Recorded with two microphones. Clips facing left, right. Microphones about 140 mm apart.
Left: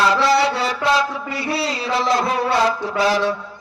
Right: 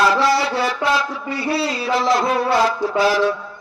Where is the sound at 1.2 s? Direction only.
25° right (ahead or behind).